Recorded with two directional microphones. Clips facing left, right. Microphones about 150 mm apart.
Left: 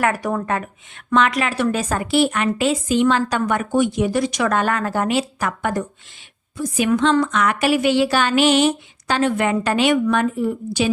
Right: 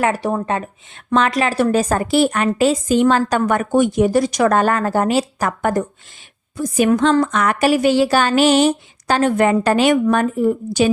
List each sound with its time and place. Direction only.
0.0 s a woman's voice: 30° right (ahead or behind); by 10.9 s 45° right (ahead or behind)